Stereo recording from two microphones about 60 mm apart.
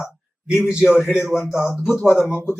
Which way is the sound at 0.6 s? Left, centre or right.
Centre.